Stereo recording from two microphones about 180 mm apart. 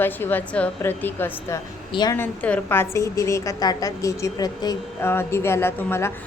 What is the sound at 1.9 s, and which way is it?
Speech, 20° left (ahead or behind).